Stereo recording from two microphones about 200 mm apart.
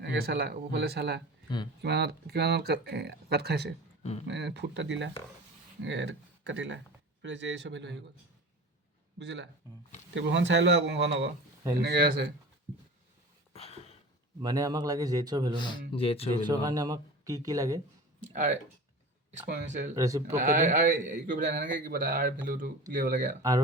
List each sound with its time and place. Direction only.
0.0 s speech: 50° right (ahead or behind)
9.1 s speech: 60° right (ahead or behind)
11.8 s speech: 50° right (ahead or behind)
13.5 s a sound: 30° left (ahead or behind)
14.4 s a man's voice: 20° right (ahead or behind)
15.5 s speech: 25° left (ahead or behind)
16.3 s speech: 20° right (ahead or behind)
18.3 s a man's voice: 35° right (ahead or behind)
20.0 s speech: 15° right (ahead or behind)
20.3 s a man's voice: 40° right (ahead or behind)
23.4 s speech: 15° right (ahead or behind)